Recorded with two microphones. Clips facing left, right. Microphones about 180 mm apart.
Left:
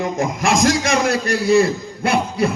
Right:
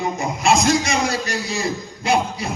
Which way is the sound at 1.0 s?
60° left (ahead or behind).